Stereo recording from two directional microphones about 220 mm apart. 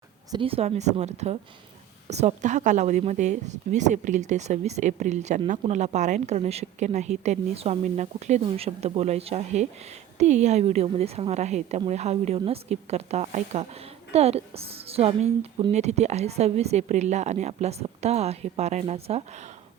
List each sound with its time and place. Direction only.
0.3 s a woman's voice: 25° right (ahead or behind)